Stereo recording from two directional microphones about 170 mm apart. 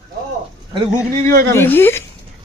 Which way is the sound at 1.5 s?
10° left (ahead or behind).